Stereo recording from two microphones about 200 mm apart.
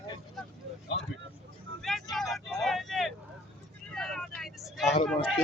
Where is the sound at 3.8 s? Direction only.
5° left (ahead or behind).